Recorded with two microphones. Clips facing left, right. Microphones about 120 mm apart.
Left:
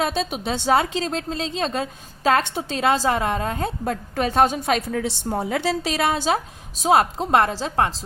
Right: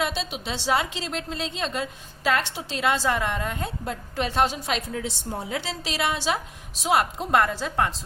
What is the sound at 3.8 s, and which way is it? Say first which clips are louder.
Speech: left 4 dB; 50° left (ahead or behind).